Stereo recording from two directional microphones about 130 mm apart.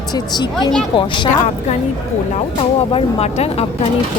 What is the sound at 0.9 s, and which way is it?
Speech, 40° left (ahead or behind).